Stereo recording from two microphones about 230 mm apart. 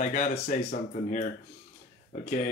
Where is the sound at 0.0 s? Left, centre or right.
Left.